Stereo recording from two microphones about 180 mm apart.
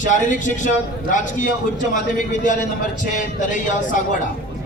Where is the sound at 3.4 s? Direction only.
45° left (ahead or behind).